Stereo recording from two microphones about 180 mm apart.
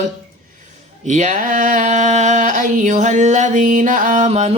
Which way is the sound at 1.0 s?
40° right (ahead or behind).